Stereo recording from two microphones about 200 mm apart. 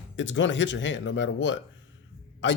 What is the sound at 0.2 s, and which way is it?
Speech, 65° left (ahead or behind).